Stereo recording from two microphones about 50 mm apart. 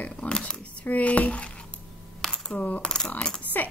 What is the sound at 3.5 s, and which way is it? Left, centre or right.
Speech, left.